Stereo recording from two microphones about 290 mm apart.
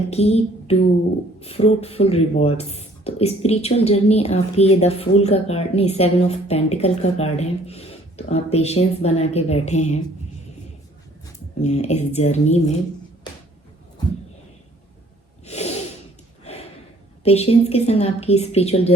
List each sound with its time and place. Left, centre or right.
0.1 s a woman's voice: left
11.6 s a woman's voice: left
15.4 s snort: left
16.4 s a sound: left
17.2 s a woman's voice: left